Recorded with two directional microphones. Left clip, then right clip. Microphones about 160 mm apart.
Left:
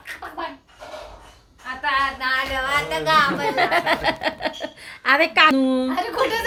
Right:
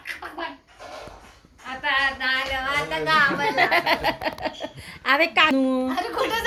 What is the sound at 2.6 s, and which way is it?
Speech, 65° left (ahead or behind).